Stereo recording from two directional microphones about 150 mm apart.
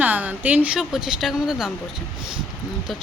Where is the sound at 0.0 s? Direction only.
10° right (ahead or behind).